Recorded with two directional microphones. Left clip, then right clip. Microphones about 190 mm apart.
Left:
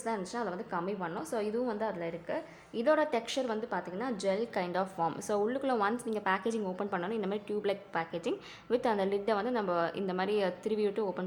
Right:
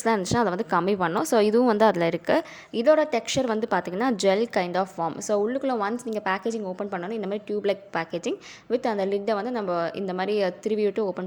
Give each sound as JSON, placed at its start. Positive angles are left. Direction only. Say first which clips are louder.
{"t": 0.0, "sound": "a woman's voice", "louder": "right 12 dB", "side_deg": -45}
{"t": 2.7, "sound": "a woman's voice", "louder": "right 8 dB", "side_deg": -30}